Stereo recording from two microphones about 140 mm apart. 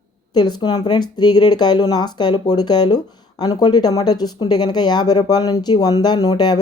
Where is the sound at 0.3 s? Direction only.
30° left (ahead or behind).